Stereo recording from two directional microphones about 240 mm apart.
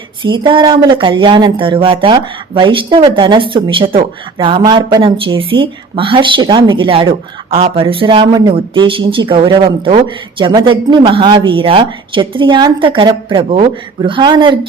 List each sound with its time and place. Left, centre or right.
0.2 s speech: centre